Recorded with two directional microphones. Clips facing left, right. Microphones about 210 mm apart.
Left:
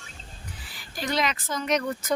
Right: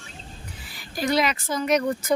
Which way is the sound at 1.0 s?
10° right (ahead or behind).